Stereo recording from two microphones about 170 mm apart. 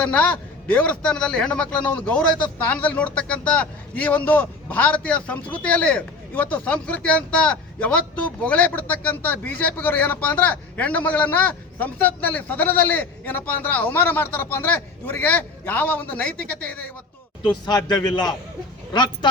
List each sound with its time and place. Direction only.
0.0 s a man's voice: 10° left (ahead or behind)
17.4 s speech: 25° left (ahead or behind)